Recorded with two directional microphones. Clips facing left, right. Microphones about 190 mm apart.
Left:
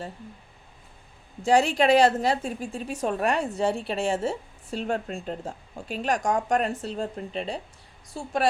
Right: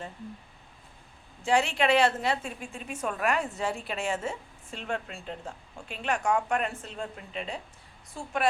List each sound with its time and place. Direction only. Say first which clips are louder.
1.5 s speech: left 5 dB; 40° left (ahead or behind)